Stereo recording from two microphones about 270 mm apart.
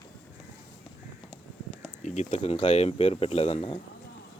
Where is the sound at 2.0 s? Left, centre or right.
Left.